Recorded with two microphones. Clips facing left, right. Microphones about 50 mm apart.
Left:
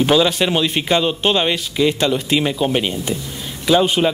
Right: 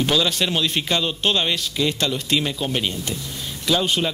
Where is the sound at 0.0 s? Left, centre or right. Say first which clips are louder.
Left 6 dB; centre.